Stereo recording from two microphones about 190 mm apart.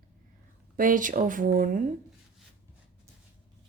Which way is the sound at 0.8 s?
45° right (ahead or behind).